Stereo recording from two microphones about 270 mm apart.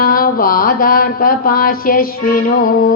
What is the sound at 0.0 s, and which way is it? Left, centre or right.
Music, left.